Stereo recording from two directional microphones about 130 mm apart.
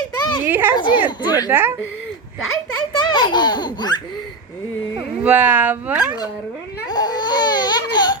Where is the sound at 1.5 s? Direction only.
15° right (ahead or behind).